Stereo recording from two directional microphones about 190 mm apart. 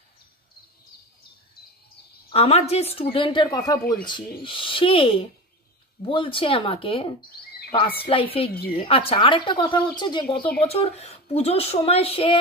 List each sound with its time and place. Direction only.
2.2 s a woman's voice: 30° left (ahead or behind)
7.2 s a sound: 55° left (ahead or behind)
8.1 s a woman's voice: 30° left (ahead or behind)